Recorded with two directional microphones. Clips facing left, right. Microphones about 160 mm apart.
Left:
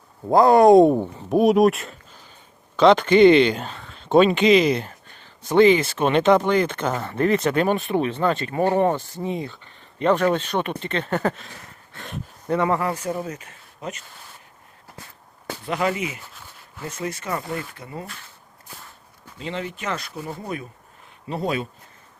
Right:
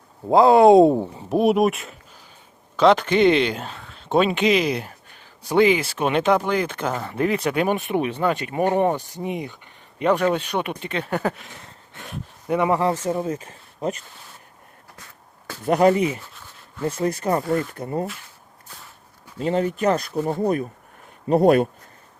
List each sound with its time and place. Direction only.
0.3 s speech: 25° right (ahead or behind)
0.9 s speech: centre (ahead or behind); by 13.9 s 30° right (ahead or behind)
15.6 s speech: 40° right (ahead or behind)
19.4 s speech: 45° right (ahead or behind)